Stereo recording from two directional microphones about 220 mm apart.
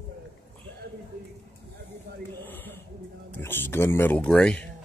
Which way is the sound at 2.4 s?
10° left (ahead or behind).